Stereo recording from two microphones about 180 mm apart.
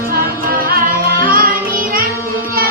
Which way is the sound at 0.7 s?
55° right (ahead or behind).